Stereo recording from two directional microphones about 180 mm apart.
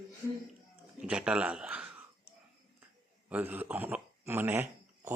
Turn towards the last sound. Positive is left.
turn(degrees=-15)  # may be behind; listen again after turning